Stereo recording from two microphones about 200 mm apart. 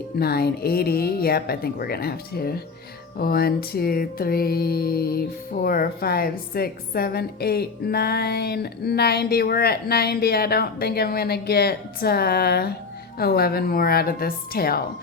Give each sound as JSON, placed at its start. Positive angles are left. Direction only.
{"t": 0.2, "sound": "a woman's voice", "side_deg": 50}